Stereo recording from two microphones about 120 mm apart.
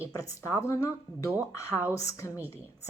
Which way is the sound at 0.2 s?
25° left (ahead or behind).